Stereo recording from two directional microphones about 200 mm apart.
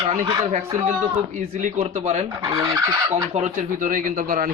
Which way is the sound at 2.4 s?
25° right (ahead or behind).